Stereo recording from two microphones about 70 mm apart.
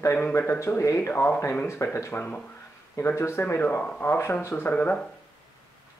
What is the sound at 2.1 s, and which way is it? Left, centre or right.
Speech, left.